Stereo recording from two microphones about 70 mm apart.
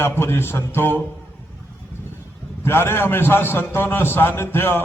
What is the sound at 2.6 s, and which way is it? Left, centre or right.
A man's voice, left.